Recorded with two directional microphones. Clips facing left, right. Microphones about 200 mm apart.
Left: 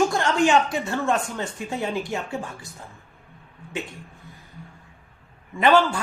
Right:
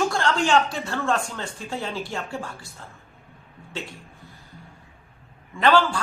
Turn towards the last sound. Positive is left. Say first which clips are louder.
# left 1 dB
turn(degrees=20)  # may be behind; listen again after turning